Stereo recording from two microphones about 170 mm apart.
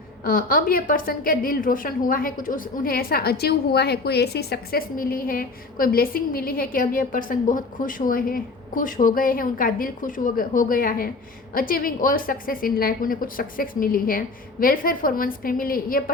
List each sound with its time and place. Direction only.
0.3 s a woman's voice: 60° left (ahead or behind)